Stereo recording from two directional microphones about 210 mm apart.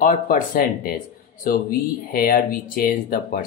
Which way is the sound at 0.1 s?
45° left (ahead or behind).